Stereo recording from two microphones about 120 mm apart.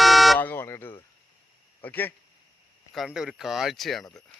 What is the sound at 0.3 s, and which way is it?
Buzzer, 15° left (ahead or behind).